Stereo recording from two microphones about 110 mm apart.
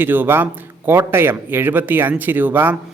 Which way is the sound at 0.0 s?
20° right (ahead or behind).